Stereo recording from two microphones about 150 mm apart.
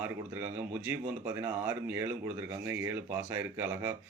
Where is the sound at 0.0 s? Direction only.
15° right (ahead or behind).